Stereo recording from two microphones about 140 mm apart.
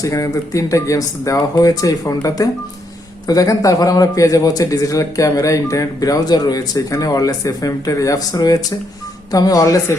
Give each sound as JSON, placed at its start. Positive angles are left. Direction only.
{"t": 0.0, "sound": "a man's voice", "side_deg": 25}